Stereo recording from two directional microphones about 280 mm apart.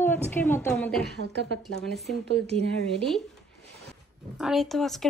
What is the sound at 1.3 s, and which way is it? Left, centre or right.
Speech, right.